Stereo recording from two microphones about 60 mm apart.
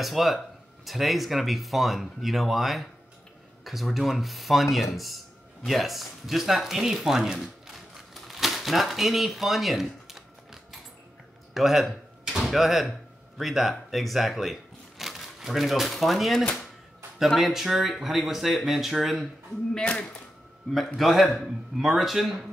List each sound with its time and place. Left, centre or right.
0.0 s speech: centre
19.9 s speech: left
20.7 s speech: centre